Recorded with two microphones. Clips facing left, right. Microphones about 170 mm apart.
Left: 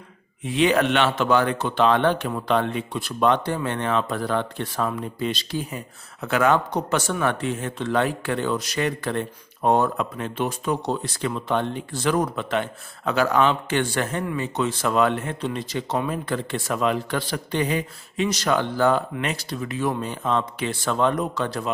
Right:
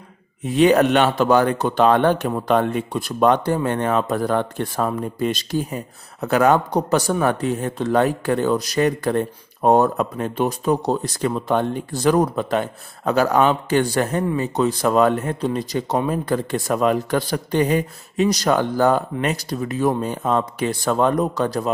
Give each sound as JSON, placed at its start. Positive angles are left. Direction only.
{"t": 0.4, "sound": "speech", "side_deg": -40}